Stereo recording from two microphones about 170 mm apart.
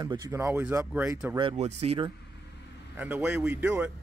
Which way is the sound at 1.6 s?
35° right (ahead or behind).